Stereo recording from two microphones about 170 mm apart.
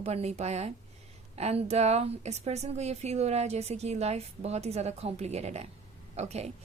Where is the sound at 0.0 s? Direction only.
40° right (ahead or behind).